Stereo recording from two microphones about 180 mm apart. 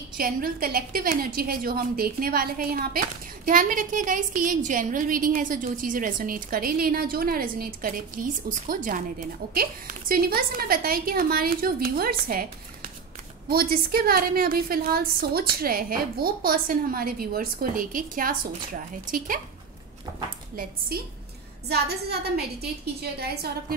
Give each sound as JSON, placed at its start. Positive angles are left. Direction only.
{"t": 0.2, "sound": "a woman's voice", "side_deg": -55}
{"t": 13.5, "sound": "a woman's voice", "side_deg": -55}
{"t": 21.6, "sound": "a woman's voice", "side_deg": -60}